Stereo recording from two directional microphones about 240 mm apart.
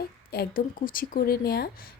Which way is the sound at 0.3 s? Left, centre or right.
Left.